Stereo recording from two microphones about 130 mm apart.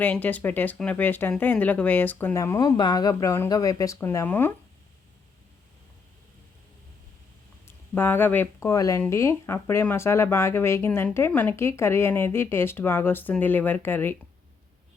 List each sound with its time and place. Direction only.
0.0 s speech: 15° left (ahead or behind)
7.9 s speech: 15° left (ahead or behind)
8.7 s speech: 25° left (ahead or behind)